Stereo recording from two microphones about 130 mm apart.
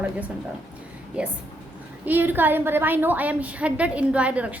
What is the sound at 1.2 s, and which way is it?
A woman's voice, 10° right (ahead or behind).